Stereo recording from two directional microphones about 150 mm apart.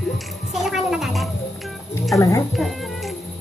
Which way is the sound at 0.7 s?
Centre (ahead or behind).